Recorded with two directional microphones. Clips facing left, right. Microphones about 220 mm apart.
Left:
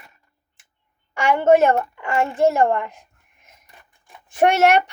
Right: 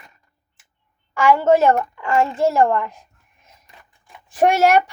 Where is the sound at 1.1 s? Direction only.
20° left (ahead or behind).